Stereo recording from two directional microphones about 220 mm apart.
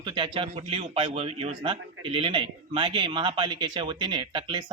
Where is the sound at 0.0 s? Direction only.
20° right (ahead or behind).